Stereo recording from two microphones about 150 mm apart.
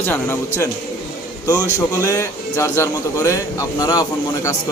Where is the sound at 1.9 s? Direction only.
20° left (ahead or behind).